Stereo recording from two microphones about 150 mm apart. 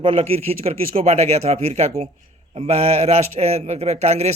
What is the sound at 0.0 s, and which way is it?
A man's voice, 35° right (ahead or behind).